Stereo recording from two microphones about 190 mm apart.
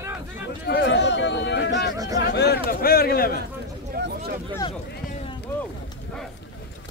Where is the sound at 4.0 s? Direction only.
55° right (ahead or behind).